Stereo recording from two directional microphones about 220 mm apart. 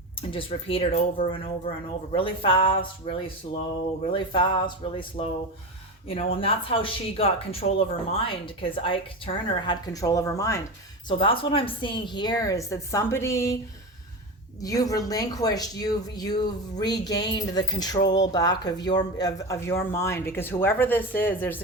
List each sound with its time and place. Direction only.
0.2 s speech: 25° left (ahead or behind)
14.6 s speech: 15° left (ahead or behind)